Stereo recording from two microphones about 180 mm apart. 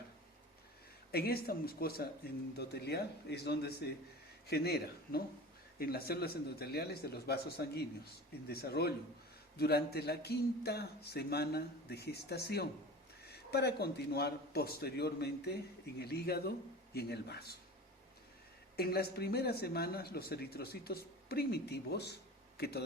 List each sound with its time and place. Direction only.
1.1 s speech: 60° left (ahead or behind)
18.8 s speech: 60° left (ahead or behind)